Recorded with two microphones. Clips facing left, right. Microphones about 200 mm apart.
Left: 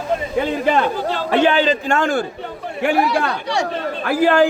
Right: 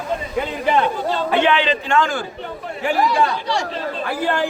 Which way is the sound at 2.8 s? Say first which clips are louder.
Left 1 dB; 65° left (ahead or behind).